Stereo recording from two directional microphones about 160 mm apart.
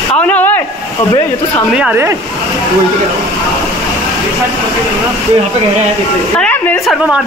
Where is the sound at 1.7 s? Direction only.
5° right (ahead or behind).